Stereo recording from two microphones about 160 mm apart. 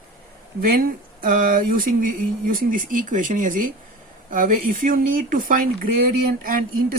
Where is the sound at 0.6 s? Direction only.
70° right (ahead or behind).